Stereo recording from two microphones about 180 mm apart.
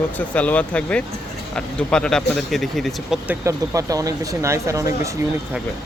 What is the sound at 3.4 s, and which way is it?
Speech, 20° right (ahead or behind).